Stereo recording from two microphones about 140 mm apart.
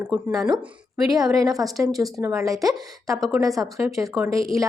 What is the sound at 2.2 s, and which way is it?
Speech, 20° right (ahead or behind).